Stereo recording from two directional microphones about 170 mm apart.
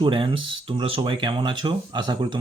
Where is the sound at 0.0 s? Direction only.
30° right (ahead or behind).